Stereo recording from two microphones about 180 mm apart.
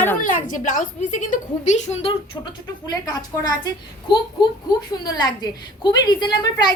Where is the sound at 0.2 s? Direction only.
45° left (ahead or behind); by 3.5 s 25° left (ahead or behind).